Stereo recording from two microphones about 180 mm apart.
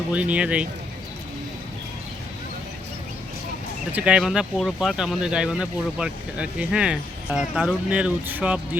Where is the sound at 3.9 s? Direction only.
5° right (ahead or behind).